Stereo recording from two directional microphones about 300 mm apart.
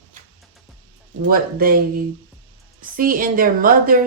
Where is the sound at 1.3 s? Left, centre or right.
Right.